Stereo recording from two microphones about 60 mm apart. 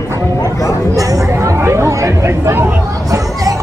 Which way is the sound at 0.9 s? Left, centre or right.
Right.